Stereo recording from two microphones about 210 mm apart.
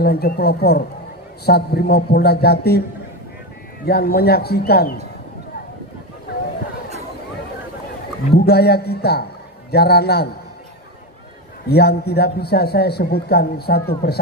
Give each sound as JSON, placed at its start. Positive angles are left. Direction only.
{"t": 0.0, "sound": "a man's voice", "side_deg": 50}
{"t": 3.8, "sound": "a man's voice", "side_deg": 50}
{"t": 8.3, "sound": "a man's voice", "side_deg": 50}
{"t": 11.7, "sound": "a man's voice", "side_deg": 50}